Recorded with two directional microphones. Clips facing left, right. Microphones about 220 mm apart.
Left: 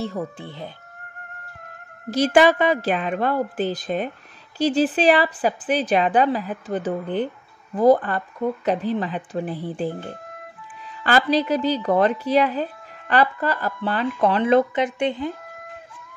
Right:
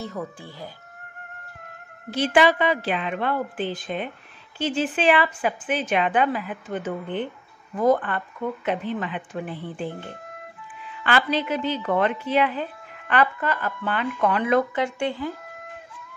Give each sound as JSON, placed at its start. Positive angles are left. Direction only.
{"t": 0.0, "sound": "speech", "side_deg": 25}
{"t": 2.0, "sound": "a woman's voice", "side_deg": 40}